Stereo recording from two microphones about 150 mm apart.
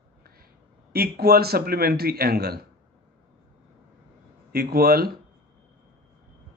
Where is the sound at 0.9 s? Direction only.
90° right.